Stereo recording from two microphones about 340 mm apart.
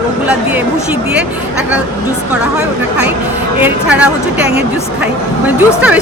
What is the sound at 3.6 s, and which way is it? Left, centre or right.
Speech, centre.